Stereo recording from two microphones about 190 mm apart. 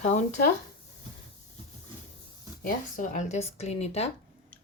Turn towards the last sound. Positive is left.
turn(degrees=35)  # may be behind; listen again after turning